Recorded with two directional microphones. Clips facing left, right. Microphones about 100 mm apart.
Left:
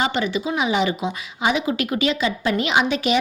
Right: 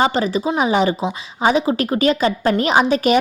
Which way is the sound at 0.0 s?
35° right (ahead or behind).